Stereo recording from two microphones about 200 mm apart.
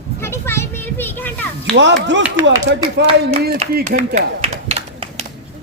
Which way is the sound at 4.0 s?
30° right (ahead or behind).